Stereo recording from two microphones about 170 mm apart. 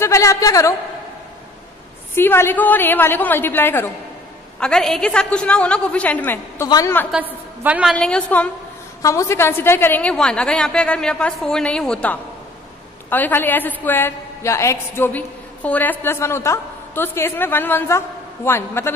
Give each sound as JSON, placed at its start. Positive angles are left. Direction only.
{"t": 0.0, "sound": "a man's voice", "side_deg": 15}
{"t": 2.1, "sound": "a woman's voice", "side_deg": 15}
{"t": 7.1, "sound": "a woman's voice", "side_deg": -10}
{"t": 7.9, "sound": "a woman's voice", "side_deg": 5}
{"t": 9.0, "sound": "a woman's voice", "side_deg": 15}